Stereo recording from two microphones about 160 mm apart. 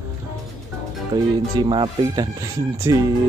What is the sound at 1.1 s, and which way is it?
Speech, 30° right (ahead or behind).